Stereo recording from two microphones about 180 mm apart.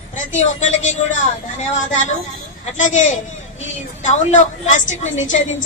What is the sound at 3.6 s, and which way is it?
A woman's voice, 40° left (ahead or behind).